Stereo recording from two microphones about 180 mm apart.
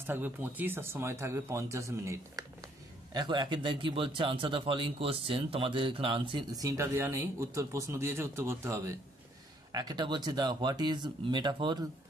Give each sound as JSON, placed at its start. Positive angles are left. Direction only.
{"t": 0.0, "sound": "speech", "side_deg": -10}